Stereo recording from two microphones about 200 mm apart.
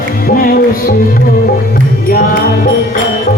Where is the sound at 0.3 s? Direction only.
45° left (ahead or behind).